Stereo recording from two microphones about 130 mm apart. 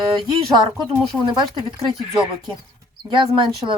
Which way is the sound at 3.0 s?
35° right (ahead or behind).